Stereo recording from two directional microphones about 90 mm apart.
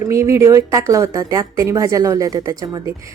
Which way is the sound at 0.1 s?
35° right (ahead or behind).